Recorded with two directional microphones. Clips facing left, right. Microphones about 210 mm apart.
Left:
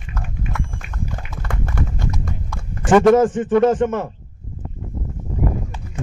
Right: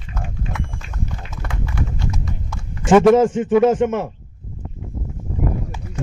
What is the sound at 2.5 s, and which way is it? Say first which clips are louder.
A man's voice: right 1 dB; 5° right (ahead or behind).